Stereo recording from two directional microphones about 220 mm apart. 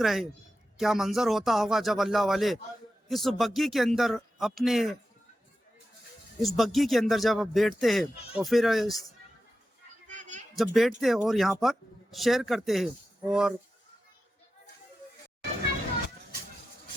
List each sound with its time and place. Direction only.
0.0 s speech: centre (ahead or behind)
6.6 s speech: centre (ahead or behind)
10.1 s a sound: 35° right (ahead or behind)
10.6 s speech: centre (ahead or behind)